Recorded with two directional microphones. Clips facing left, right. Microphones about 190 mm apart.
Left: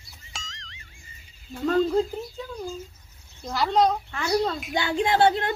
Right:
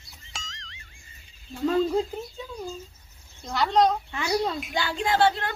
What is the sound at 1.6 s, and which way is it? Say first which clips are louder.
Speech: left 1 dB; 5° right (ahead or behind).